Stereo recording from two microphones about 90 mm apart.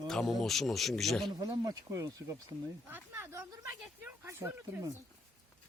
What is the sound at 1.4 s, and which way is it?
Speech, 45° right (ahead or behind).